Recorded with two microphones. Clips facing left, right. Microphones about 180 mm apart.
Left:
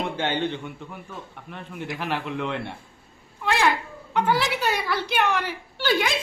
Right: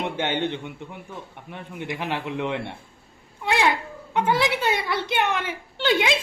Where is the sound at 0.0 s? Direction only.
20° right (ahead or behind).